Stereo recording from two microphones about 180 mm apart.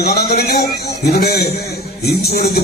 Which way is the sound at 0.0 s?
60° left (ahead or behind).